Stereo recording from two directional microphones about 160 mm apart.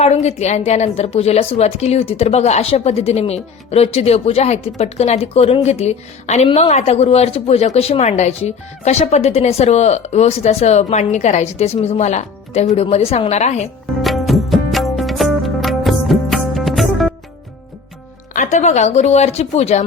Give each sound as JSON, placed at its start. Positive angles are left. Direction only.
{"t": 0.0, "sound": "a woman's voice", "side_deg": 40}
{"t": 14.0, "sound": "music", "side_deg": 0}
{"t": 18.3, "sound": "a woman's voice", "side_deg": 45}